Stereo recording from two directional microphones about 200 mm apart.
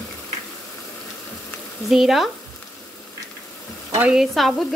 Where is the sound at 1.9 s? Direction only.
Centre (ahead or behind).